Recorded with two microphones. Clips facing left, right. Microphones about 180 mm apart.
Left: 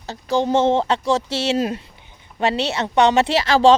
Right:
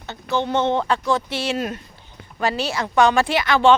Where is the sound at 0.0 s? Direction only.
35° left (ahead or behind).